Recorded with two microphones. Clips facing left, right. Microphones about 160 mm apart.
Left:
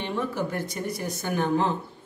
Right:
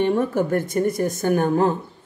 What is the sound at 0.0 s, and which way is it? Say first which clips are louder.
Speech: right 9 dB; 50° right (ahead or behind).